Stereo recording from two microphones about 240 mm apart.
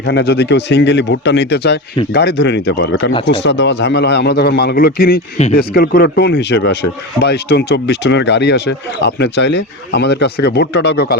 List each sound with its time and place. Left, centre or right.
0.0 s speech: left